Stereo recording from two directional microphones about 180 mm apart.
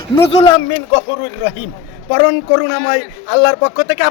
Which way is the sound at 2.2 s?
30° left (ahead or behind).